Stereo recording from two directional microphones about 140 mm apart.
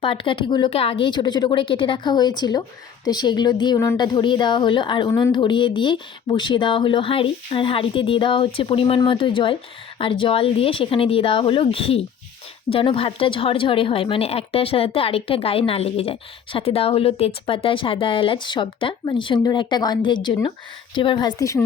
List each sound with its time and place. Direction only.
0.0 s a woman's voice: 40° left (ahead or behind)